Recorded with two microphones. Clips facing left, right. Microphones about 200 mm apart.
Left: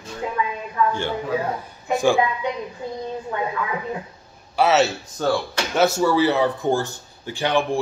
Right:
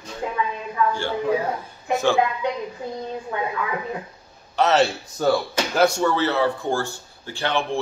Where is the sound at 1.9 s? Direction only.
15° left (ahead or behind).